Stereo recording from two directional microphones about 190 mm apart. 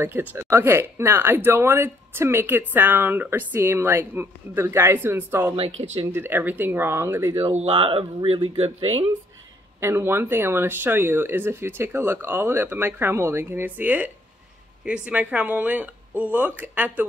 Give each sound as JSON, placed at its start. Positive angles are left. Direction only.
{"t": 0.0, "sound": "speech", "side_deg": -10}
{"t": 5.6, "sound": "speech", "side_deg": -35}
{"t": 6.1, "sound": "speech", "side_deg": -10}
{"t": 7.4, "sound": "speech", "side_deg": -30}
{"t": 9.8, "sound": "speech", "side_deg": -15}